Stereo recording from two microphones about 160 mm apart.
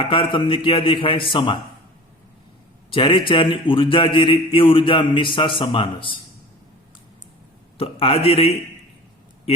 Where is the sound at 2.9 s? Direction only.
35° left (ahead or behind).